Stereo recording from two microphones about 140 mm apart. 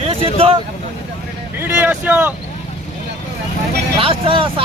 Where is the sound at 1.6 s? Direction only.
10° right (ahead or behind).